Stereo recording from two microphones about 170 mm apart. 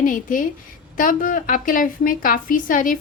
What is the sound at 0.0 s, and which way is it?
A woman's voice, 50° left (ahead or behind).